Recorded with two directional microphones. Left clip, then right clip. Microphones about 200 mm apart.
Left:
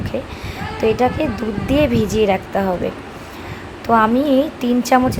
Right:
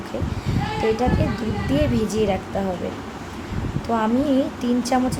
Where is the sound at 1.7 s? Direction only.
15° left (ahead or behind).